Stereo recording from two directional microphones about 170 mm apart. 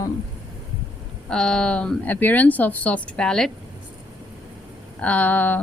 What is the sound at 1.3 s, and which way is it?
A woman's voice, 5° left (ahead or behind).